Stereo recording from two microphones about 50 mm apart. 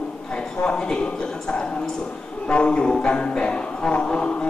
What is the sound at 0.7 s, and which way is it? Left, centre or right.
Speech, centre.